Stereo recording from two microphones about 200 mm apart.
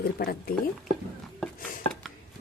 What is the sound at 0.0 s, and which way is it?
Speech, 50° left (ahead or behind).